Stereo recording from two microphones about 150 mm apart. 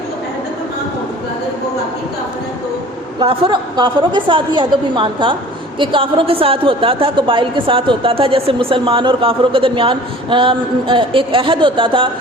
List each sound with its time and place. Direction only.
3.2 s a woman's voice: 35° right (ahead or behind)